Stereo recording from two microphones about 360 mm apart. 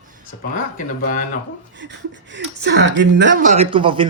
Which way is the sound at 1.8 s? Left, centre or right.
Right.